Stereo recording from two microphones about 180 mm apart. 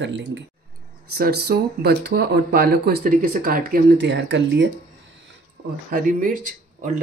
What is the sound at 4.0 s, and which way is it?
Speech, 80° right.